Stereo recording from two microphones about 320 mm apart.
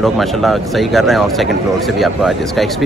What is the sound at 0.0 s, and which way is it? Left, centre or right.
Speech, centre.